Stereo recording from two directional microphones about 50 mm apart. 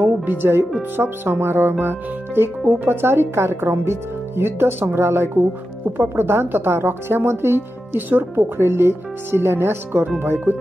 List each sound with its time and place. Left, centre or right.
0.0 s speech: right
8.1 s speech: right
8.5 s speech: right